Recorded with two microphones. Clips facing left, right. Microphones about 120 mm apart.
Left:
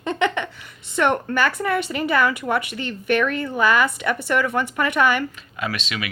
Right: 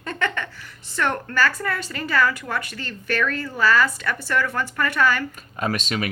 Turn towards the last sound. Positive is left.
turn(degrees=-40)  # may be behind; listen again after turning